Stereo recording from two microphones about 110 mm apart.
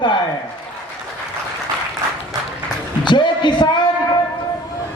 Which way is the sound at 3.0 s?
45° left (ahead or behind).